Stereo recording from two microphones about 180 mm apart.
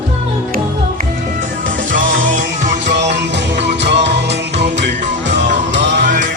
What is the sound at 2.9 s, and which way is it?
Music, 75° right (ahead or behind).